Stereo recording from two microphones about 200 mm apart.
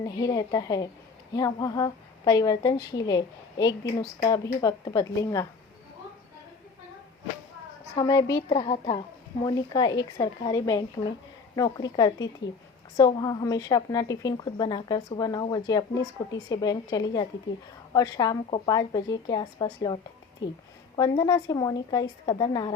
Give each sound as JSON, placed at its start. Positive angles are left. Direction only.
{"t": 0.0, "sound": "a woman's voice", "side_deg": 20}
{"t": 7.9, "sound": "a woman's voice", "side_deg": 20}